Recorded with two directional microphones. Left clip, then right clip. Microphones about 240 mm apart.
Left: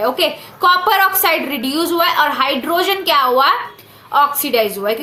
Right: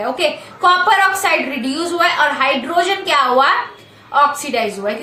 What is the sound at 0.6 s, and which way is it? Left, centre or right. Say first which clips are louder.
A woman's voice: even; left.